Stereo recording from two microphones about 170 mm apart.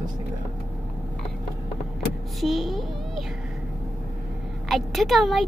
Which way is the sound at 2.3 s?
Centre (ahead or behind).